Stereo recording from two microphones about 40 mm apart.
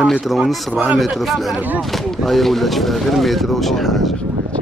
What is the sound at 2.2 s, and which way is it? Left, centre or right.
Speech, centre.